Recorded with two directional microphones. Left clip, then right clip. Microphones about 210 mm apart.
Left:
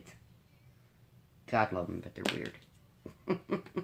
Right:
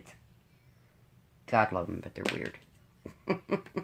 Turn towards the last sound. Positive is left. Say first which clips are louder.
# right 2 dB
turn(degrees=-35)  # may be behind; listen again after turning